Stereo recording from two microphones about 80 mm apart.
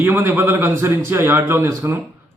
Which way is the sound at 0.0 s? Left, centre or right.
Right.